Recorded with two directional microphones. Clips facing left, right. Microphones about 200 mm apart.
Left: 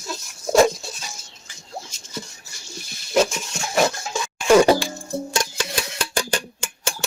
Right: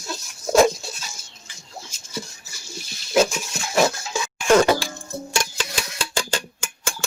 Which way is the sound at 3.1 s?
5° right (ahead or behind).